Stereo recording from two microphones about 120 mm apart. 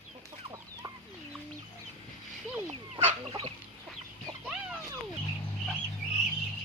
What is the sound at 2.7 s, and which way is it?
Fowl, 65° right (ahead or behind).